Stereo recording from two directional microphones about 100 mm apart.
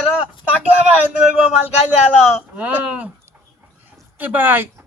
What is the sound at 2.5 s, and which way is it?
Speech, 15° right (ahead or behind).